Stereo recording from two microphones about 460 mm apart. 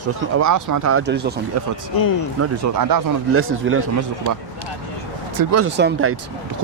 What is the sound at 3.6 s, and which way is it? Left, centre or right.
Speech, right.